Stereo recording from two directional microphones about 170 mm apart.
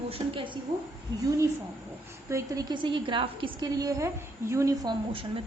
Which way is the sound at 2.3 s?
20° right (ahead or behind).